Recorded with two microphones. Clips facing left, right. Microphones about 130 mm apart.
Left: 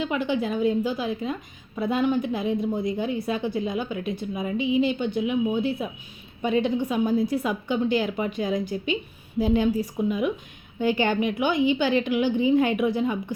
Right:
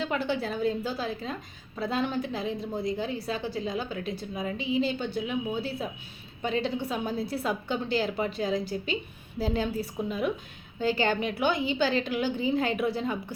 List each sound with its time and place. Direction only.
0.1 s a woman's voice: 15° left (ahead or behind)